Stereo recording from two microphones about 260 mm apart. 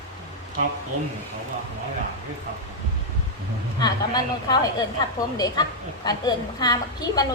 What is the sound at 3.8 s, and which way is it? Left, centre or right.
A woman's voice, centre.